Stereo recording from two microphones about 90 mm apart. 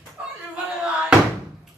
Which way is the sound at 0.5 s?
10° right (ahead or behind).